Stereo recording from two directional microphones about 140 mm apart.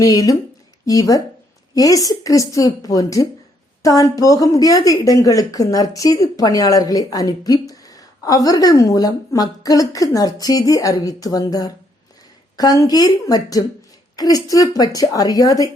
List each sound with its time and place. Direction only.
0.0 s a woman's voice: 25° left (ahead or behind)
12.8 s a woman's voice: 25° left (ahead or behind)